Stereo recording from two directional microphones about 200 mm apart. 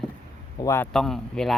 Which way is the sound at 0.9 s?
Centre (ahead or behind).